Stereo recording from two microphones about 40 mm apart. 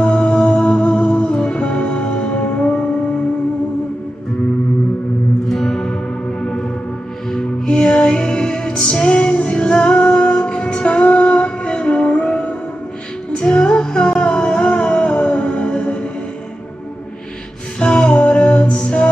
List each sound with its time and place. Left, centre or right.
0.0 s music: left
5.5 s music: centre
7.6 s music: left
17.7 s music: left